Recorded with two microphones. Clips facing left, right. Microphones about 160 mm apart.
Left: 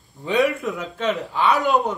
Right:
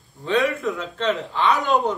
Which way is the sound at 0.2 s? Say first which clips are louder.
Left 1 dB; 15° left (ahead or behind).